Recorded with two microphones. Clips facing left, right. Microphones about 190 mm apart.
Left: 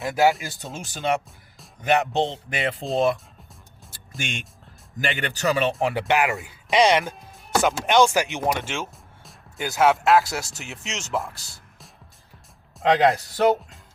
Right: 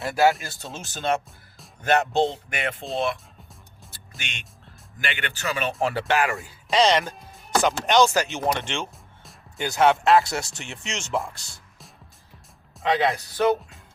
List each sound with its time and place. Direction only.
0.0 s speech: 15° left (ahead or behind)
2.9 s speech: 40° left (ahead or behind)
4.2 s speech: 45° left (ahead or behind)
5.8 s speech: 15° left (ahead or behind)
7.0 s speech: centre (ahead or behind)
12.9 s speech: 45° left (ahead or behind)